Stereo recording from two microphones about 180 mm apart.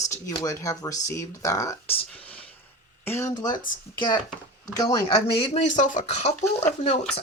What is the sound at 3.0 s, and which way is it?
Speech, 15° left (ahead or behind).